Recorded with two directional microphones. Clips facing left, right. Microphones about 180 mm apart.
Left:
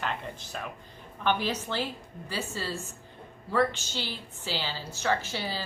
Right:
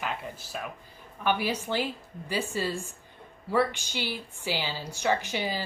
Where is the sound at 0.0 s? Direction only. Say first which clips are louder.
Even; 5° right (ahead or behind).